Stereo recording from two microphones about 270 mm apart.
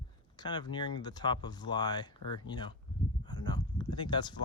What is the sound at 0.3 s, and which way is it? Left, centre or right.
Speech, centre.